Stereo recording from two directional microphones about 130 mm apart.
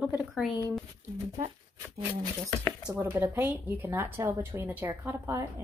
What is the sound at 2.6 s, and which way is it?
Speech, 15° right (ahead or behind).